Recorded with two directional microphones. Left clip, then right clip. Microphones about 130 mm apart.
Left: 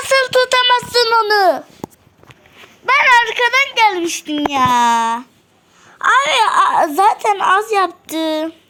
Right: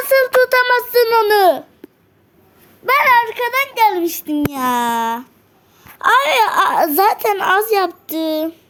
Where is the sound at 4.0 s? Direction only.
35° right (ahead or behind).